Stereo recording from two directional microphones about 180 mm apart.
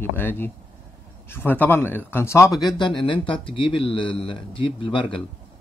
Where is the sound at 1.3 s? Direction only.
10° left (ahead or behind).